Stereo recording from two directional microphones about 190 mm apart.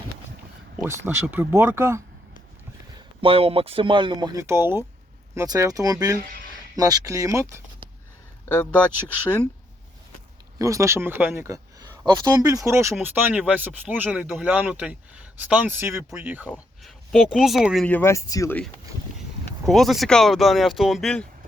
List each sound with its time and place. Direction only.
0.9 s speech: 15° right (ahead or behind)
3.2 s speech: 30° right (ahead or behind)
4.4 s speech: 15° right (ahead or behind)
8.4 s speech: 10° left (ahead or behind)
10.6 s speech: 15° right (ahead or behind)
17.8 s speech: 10° left (ahead or behind)
19.6 s speech: centre (ahead or behind)